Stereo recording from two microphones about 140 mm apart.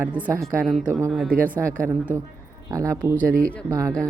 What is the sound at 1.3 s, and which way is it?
Speech, 85° right.